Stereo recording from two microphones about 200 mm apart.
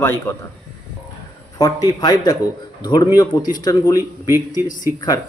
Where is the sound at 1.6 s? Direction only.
15° left (ahead or behind).